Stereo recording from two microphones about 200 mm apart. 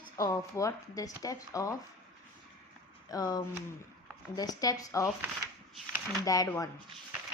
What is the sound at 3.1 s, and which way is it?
Speech, 20° left (ahead or behind).